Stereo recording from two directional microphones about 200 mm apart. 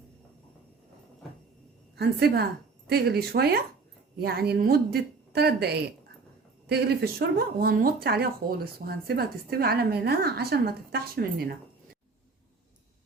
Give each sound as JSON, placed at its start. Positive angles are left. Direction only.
{"t": 2.0, "sound": "a woman's voice", "side_deg": -55}